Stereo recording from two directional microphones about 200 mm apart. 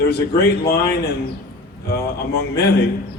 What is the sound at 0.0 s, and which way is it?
Speech, 55° left (ahead or behind).